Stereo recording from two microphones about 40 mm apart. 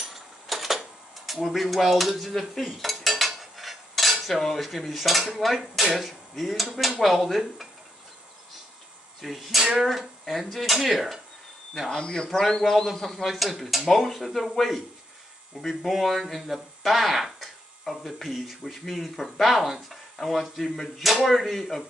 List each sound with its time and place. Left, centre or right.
0.1 s a sound: centre
1.2 s speech: centre
2.6 s cutlery: centre
6.0 s speech: centre
6.7 s speech: centre
7.0 s speech: centre
9.2 s speech: centre
11.9 s speech: left; by 14.8 s centre
15.8 s speech: centre